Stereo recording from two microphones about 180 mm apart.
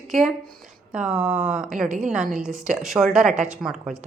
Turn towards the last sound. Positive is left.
turn(degrees=-5)  # may be behind; listen again after turning